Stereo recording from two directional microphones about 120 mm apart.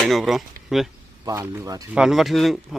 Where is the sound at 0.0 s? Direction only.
Centre (ahead or behind).